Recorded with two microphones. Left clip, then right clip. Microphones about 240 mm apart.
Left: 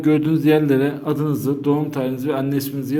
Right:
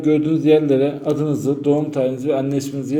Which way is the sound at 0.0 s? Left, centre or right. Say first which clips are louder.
Right 1 dB; left.